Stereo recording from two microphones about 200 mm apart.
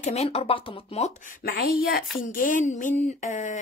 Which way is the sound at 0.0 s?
30° left (ahead or behind).